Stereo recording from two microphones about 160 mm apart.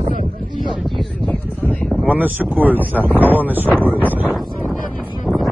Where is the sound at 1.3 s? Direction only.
10° left (ahead or behind).